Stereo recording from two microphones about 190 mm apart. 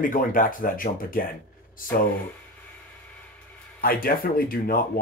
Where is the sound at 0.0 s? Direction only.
45° left (ahead or behind).